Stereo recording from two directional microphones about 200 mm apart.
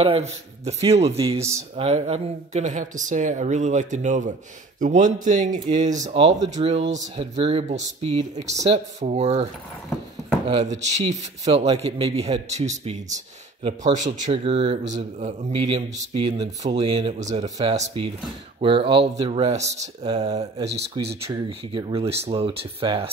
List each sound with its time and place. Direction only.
0.0 s a man's voice: 30° right (ahead or behind)
10.9 s a man's voice: 35° right (ahead or behind)
17.2 s speech: 35° right (ahead or behind)
17.7 s a man's voice: 25° right (ahead or behind)